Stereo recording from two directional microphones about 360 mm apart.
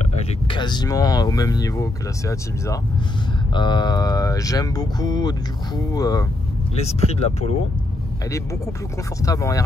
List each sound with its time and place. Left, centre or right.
0.5 s speech: centre
9.2 s speech: centre